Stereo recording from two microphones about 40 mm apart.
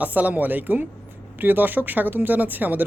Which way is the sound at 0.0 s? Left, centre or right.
Right.